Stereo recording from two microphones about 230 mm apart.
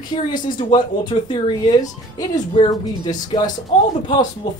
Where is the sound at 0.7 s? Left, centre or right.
Centre.